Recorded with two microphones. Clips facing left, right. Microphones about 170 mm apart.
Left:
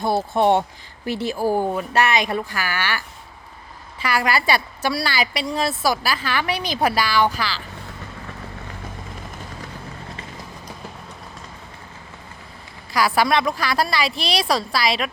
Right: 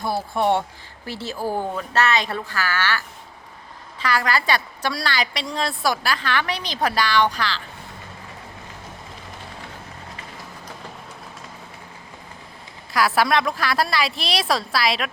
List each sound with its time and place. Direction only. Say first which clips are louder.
0.0 s a woman's voice: left 4 dB; 25° left (ahead or behind)
4.0 s a woman's voice: left 1 dB; 10° left (ahead or behind)
12.9 s speech: left 1 dB; centre (ahead or behind)